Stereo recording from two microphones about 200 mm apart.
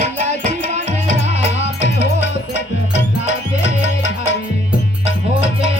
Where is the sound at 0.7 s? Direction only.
35° right (ahead or behind).